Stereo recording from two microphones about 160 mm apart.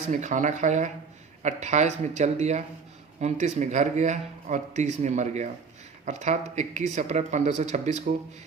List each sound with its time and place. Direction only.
0.1 s speech: 50° right (ahead or behind)